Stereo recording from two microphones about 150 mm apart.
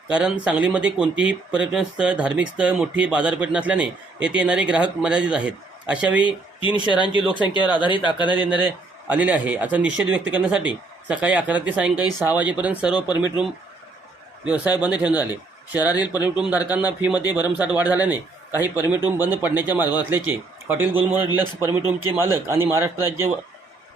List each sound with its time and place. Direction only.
0.1 s speech: 5° right (ahead or behind)
6.2 s speech: 35° left (ahead or behind)
8.4 s speech: 10° right (ahead or behind)
11.9 s speech: 25° left (ahead or behind)
12.3 s speech: 10° right (ahead or behind)
15.1 s speech: 25° left (ahead or behind)
16.1 s speech: 10° right (ahead or behind)